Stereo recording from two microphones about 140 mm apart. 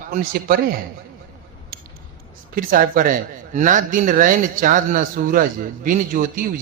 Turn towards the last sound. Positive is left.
turn(degrees=-75)  # may be behind; listen again after turning